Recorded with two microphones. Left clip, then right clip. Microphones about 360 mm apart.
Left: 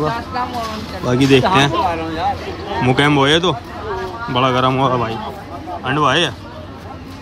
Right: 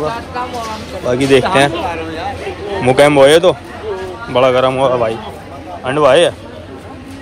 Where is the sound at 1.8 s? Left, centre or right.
Left.